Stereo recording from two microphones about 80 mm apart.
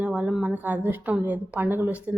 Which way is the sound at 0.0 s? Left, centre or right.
Centre.